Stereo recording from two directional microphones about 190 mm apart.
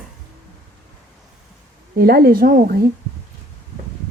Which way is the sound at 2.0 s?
55° right (ahead or behind).